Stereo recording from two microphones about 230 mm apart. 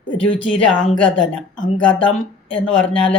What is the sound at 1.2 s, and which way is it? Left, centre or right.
A woman's voice, centre.